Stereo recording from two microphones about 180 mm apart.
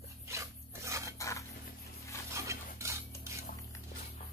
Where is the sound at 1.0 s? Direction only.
15° left (ahead or behind).